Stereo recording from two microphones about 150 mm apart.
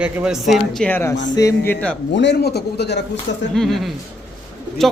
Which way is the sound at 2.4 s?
90° left.